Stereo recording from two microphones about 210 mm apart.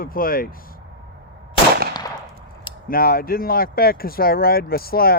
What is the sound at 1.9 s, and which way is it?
Machine gun, 20° left (ahead or behind).